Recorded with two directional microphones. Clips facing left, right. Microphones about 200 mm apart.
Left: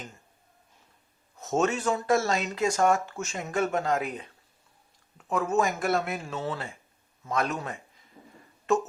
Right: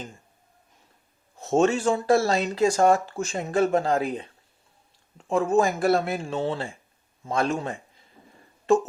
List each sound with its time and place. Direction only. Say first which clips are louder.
1.4 s a man's voice: right 5 dB; 30° right (ahead or behind)